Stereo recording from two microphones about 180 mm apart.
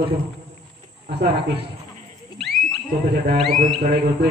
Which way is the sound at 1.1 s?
65° right (ahead or behind).